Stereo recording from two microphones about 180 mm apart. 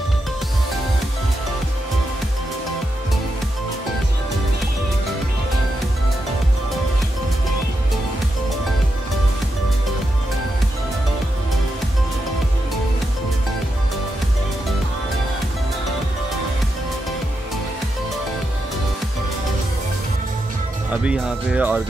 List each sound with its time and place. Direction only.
20.9 s speech: 5° right (ahead or behind)